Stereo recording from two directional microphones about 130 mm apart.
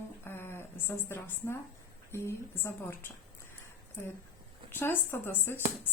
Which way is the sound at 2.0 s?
20° left (ahead or behind).